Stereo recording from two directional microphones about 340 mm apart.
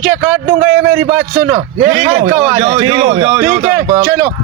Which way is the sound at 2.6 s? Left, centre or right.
Centre.